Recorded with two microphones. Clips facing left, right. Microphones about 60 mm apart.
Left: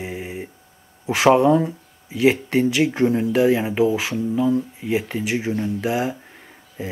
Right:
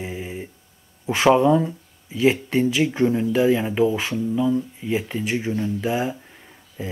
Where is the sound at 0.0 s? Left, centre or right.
Centre.